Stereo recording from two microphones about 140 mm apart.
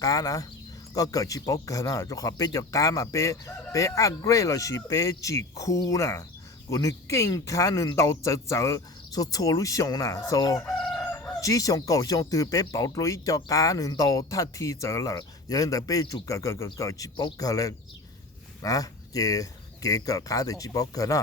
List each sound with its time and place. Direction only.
0.0 s speech: 25° left (ahead or behind)
10.8 s crowing: 5° left (ahead or behind)
11.1 s chicken: 10° left (ahead or behind)
11.3 s speech: 25° left (ahead or behind)